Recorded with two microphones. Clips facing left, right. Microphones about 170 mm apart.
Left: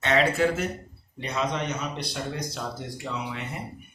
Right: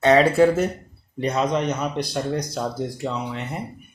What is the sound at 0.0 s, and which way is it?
Speech, 35° right (ahead or behind).